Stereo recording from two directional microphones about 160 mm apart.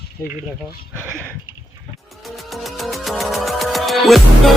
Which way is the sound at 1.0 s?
15° right (ahead or behind).